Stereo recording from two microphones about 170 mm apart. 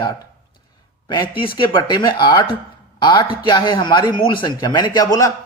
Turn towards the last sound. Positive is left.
turn(degrees=20)  # may be behind; listen again after turning